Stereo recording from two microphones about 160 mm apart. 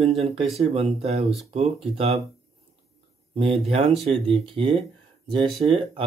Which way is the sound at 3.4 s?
35° right (ahead or behind).